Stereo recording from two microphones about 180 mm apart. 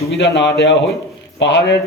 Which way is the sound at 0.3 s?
75° left (ahead or behind).